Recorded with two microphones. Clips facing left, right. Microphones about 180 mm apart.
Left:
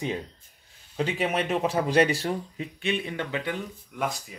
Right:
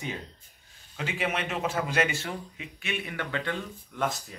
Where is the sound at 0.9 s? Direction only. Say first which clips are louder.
Left 5 dB; 35° left (ahead or behind); by 3.5 s 15° left (ahead or behind).